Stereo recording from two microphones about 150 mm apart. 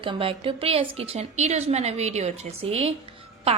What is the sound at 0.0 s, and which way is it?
A woman's voice, 35° right (ahead or behind).